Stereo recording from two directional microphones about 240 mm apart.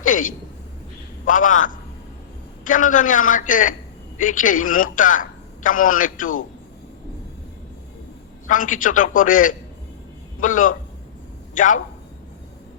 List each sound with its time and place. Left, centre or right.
0.0 s a sound: left
1.2 s a man's voice: left
8.4 s a man's voice: left